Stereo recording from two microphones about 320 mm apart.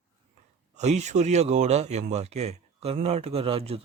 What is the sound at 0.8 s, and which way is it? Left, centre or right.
Speech, right.